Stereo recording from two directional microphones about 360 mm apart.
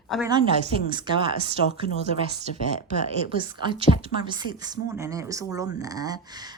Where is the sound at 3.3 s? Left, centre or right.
Centre.